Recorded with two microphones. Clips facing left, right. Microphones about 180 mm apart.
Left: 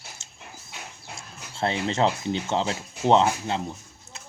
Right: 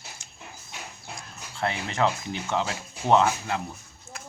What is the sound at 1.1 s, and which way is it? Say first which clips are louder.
Speech: even; 25° left (ahead or behind).